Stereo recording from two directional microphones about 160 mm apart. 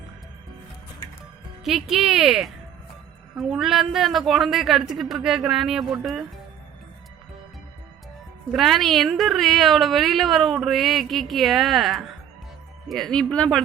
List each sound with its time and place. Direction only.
1.6 s a woman's voice: centre (ahead or behind)
8.5 s a woman's voice: centre (ahead or behind)